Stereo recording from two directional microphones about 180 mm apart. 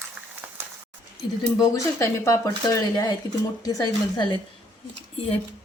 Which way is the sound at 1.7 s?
15° left (ahead or behind).